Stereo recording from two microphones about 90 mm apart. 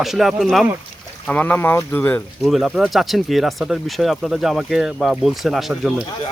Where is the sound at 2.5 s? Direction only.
Centre (ahead or behind).